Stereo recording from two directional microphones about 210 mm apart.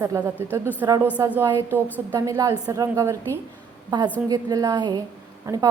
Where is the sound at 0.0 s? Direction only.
10° right (ahead or behind).